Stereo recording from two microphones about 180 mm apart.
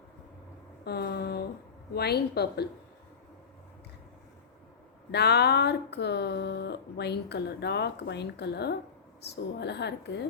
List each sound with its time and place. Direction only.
0.9 s a sound: 65° left (ahead or behind)
1.9 s a woman's voice: 65° left (ahead or behind)
5.1 s speech: 70° left (ahead or behind)